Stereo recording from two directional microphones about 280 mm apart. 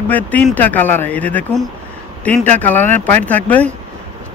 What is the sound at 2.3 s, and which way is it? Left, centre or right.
Speech, right.